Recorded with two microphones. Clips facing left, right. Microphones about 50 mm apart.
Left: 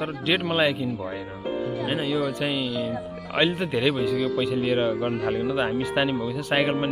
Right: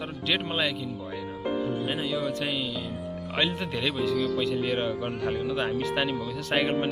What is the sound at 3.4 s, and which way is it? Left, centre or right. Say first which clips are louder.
Speech: left 6 dB; left.